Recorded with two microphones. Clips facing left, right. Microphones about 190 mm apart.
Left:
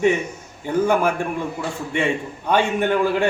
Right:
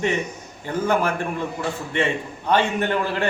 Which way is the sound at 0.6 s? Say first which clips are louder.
Left 3 dB; 10° left (ahead or behind).